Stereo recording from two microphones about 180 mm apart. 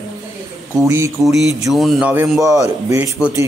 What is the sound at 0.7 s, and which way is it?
Speech, 15° right (ahead or behind).